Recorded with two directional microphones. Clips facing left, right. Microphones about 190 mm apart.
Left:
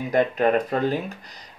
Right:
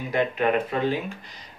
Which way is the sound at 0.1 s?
45° left (ahead or behind).